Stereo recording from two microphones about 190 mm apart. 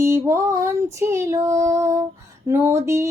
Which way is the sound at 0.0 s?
15° right (ahead or behind).